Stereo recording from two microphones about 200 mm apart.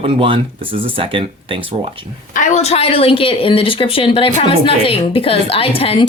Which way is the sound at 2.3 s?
35° left (ahead or behind).